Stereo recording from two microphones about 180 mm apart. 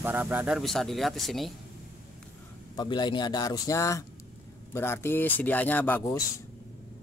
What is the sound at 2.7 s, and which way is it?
A man's voice, 25° left (ahead or behind).